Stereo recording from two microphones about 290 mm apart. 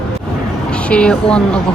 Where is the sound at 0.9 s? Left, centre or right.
Centre.